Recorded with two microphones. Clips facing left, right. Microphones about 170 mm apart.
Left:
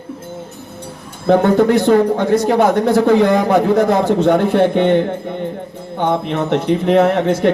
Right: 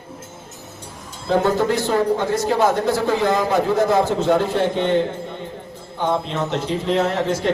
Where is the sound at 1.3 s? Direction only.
60° left (ahead or behind).